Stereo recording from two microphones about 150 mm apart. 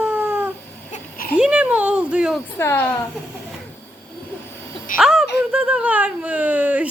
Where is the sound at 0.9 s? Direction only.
75° left (ahead or behind).